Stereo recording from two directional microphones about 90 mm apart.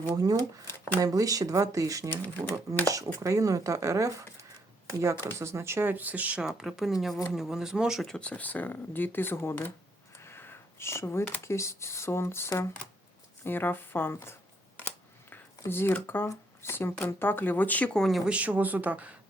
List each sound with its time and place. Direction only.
0.1 s speech: 40° right (ahead or behind)
5.1 s speech: 25° left (ahead or behind)
5.4 s speech: 30° right (ahead or behind); by 8.0 s 5° right (ahead or behind)
8.0 s speech: 10° left (ahead or behind)
10.2 s a sound: 25° left (ahead or behind)
11.4 s speech: 30° left (ahead or behind)
15.3 s a sound: 25° left (ahead or behind)
16.0 s speech: 25° left (ahead or behind); by 18.2 s 5° left (ahead or behind)
18.3 s speech: 15° right (ahead or behind)